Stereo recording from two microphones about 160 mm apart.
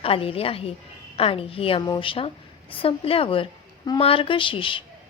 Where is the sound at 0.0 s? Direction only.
35° left (ahead or behind).